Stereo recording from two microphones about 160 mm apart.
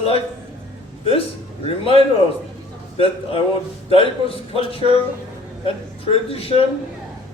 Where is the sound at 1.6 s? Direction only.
35° left (ahead or behind).